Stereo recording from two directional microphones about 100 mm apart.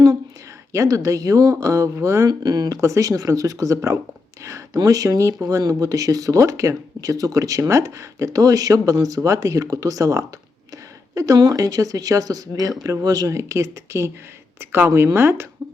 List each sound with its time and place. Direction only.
0.7 s speech: 30° right (ahead or behind)